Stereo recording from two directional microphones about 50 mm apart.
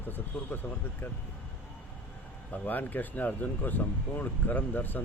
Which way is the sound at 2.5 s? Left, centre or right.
Left.